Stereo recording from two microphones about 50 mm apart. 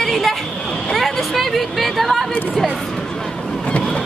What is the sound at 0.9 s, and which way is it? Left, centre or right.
Chatter, centre.